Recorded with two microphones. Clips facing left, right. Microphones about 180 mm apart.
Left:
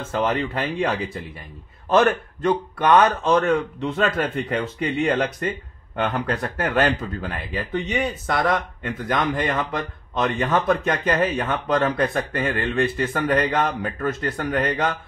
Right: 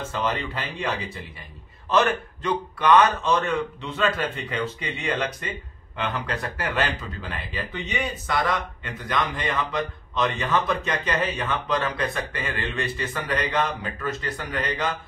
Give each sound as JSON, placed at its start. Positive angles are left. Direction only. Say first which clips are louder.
{"t": 0.1, "sound": "speech", "louder": "left 7 dB", "side_deg": 55}